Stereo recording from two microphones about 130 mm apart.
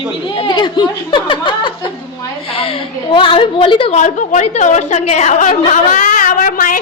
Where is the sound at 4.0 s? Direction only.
70° left (ahead or behind).